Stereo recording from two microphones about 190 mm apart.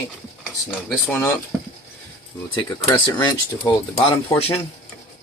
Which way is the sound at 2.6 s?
20° left (ahead or behind).